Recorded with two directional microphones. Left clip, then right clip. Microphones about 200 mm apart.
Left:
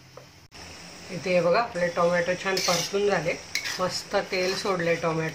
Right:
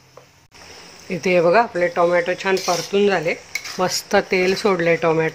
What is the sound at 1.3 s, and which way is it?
Speech, 40° right (ahead or behind).